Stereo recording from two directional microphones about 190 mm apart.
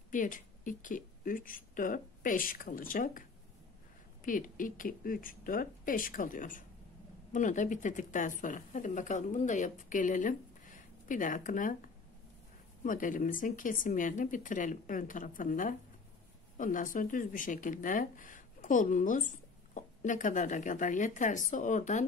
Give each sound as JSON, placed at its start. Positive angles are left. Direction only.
{"t": 0.1, "sound": "speech", "side_deg": 45}